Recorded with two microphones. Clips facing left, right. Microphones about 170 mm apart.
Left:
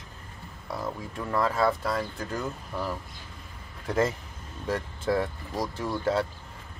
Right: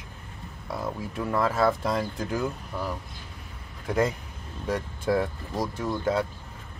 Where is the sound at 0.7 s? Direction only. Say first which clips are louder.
Right 2 dB; 5° right (ahead or behind).